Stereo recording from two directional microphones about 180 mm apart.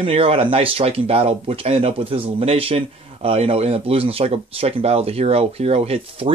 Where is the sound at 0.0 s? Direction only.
30° right (ahead or behind).